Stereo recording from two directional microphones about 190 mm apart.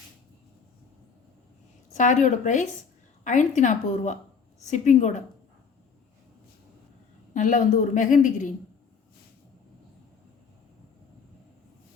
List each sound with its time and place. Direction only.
2.0 s a woman's voice: 40° left (ahead or behind)
7.3 s a woman's voice: 40° left (ahead or behind)